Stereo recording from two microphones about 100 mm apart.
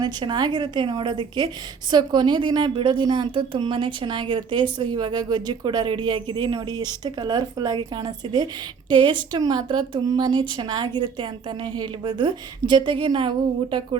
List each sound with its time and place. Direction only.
0.0 s a woman's voice: 45° right (ahead or behind)
10.1 s a woman's voice: 45° right (ahead or behind)